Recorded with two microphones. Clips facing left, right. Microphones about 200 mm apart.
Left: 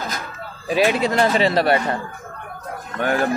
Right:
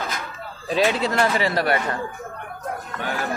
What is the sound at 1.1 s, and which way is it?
Speech, 25° left (ahead or behind).